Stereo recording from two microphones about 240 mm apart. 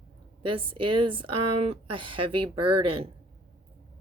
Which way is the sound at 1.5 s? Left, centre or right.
Right.